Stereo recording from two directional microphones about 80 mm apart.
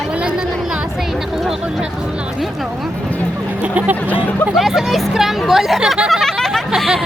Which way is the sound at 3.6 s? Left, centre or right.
Centre.